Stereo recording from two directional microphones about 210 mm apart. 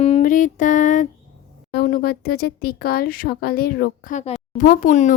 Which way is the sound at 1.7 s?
45° left (ahead or behind).